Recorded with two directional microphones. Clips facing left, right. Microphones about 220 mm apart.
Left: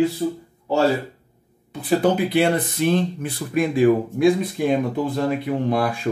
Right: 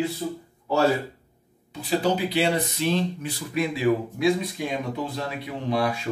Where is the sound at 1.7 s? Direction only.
55° left (ahead or behind).